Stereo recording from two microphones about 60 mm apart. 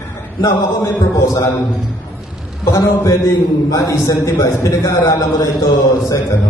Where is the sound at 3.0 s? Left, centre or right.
Left.